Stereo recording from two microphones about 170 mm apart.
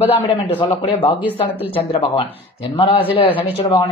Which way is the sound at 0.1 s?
35° left (ahead or behind).